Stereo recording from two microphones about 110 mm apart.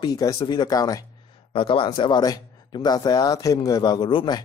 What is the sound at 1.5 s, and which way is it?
Speech, 50° left (ahead or behind).